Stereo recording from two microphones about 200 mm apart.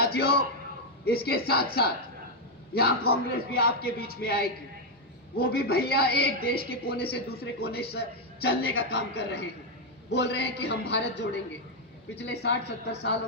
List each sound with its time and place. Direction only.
0.0 s a man's voice: 55° left (ahead or behind)